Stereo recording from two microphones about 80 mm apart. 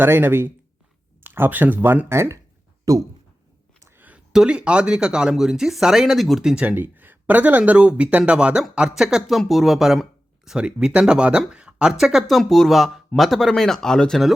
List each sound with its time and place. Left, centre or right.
0.0 s speech: right
2.9 s speech: right
3.8 s a sound: right
4.0 s speech: centre
6.7 s speech: right; by 14.3 s centre